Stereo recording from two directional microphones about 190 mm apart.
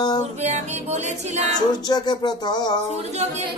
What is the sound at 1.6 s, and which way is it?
Speech, 20° left (ahead or behind).